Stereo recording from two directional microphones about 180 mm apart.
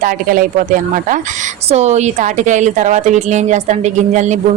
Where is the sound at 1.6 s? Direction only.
40° right (ahead or behind).